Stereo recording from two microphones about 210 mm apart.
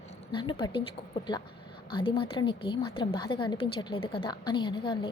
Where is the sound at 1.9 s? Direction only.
25° left (ahead or behind).